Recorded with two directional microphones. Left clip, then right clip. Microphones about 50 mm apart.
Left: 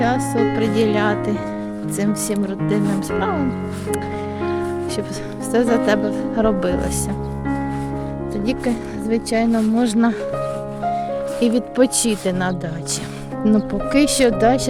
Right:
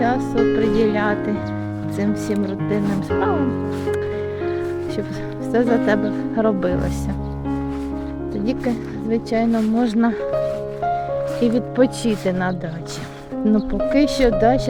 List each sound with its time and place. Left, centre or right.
0.0 s speech: left
2.7 s speech: centre
5.5 s speech: left
8.4 s speech: left
9.5 s speech: centre
9.8 s speech: left
11.4 s speech: left
12.3 s speech: left